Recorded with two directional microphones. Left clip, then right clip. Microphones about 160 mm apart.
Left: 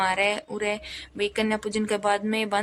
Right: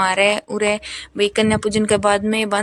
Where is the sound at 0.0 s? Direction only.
35° right (ahead or behind).